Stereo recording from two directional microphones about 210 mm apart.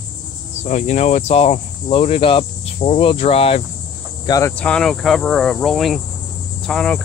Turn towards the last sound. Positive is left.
turn(degrees=5)  # may be behind; listen again after turning